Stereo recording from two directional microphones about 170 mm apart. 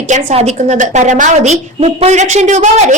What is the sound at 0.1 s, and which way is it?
A woman's voice, 45° right (ahead or behind).